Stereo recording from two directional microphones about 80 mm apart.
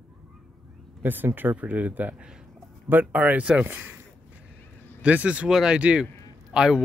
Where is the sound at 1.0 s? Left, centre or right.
Right.